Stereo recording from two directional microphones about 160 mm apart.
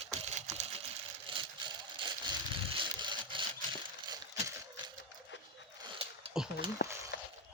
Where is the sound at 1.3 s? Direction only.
35° right (ahead or behind).